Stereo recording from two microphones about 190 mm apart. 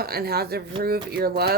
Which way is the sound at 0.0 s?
55° right (ahead or behind).